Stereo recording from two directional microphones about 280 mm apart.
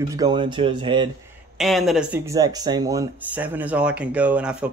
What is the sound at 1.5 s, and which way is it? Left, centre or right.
Speech, centre.